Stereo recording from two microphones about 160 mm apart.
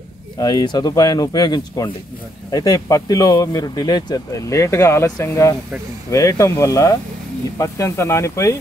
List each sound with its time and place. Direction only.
0.4 s speech: 25° left (ahead or behind)